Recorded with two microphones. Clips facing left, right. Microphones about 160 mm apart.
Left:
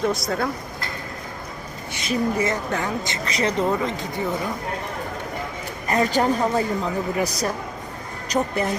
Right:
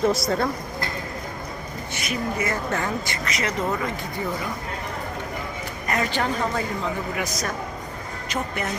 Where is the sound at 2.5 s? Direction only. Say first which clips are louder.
Left 1 dB; 15° left (ahead or behind).